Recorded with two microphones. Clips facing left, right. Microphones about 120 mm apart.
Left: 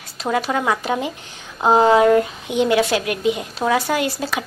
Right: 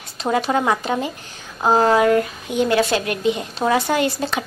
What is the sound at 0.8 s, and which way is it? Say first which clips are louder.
A woman's voice: even; 10° left (ahead or behind).